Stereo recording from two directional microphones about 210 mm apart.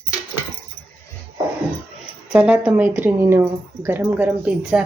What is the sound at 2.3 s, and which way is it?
A woman's voice, 5° right (ahead or behind).